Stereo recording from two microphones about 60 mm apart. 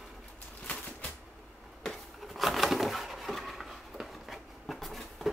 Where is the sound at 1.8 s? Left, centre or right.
Centre.